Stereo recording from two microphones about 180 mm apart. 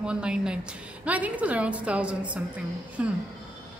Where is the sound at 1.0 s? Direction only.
10° right (ahead or behind).